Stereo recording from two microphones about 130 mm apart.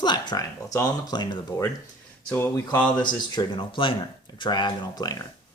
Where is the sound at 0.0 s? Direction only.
35° left (ahead or behind).